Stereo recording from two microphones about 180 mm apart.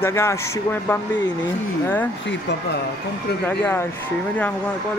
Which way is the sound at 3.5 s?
10° left (ahead or behind).